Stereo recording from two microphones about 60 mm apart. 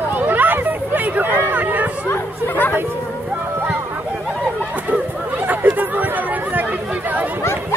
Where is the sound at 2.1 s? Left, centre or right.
Left.